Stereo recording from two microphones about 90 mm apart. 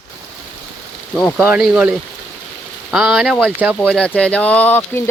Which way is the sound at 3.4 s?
20° right (ahead or behind).